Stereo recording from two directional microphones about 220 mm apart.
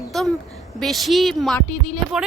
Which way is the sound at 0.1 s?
Centre (ahead or behind).